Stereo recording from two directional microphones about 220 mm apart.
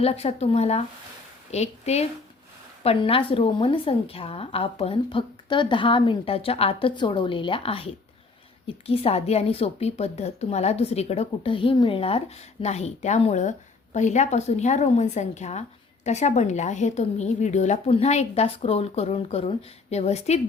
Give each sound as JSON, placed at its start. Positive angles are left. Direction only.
{"t": 0.0, "sound": "a woman's voice", "side_deg": 30}